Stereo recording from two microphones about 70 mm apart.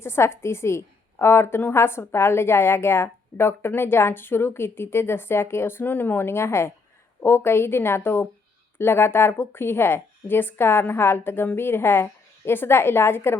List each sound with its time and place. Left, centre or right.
0.0 s a woman's voice: left